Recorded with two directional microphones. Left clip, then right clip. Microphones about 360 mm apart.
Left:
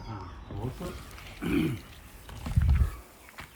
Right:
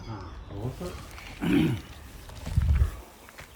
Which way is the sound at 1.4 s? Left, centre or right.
Right.